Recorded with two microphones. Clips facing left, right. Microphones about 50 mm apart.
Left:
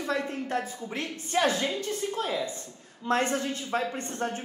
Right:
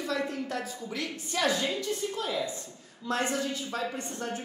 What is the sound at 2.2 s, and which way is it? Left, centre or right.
A woman's voice, left.